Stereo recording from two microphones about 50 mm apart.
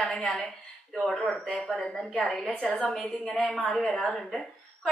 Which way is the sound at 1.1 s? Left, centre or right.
Left.